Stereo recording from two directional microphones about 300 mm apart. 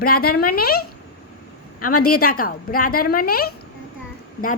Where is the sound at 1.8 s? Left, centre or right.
Left.